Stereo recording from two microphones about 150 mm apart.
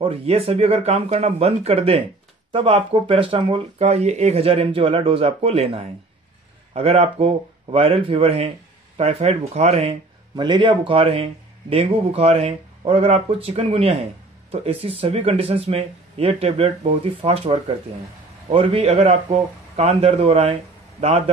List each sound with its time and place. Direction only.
0.0 s a man's voice: 40° right (ahead or behind)
10.3 s a man's voice: 30° right (ahead or behind)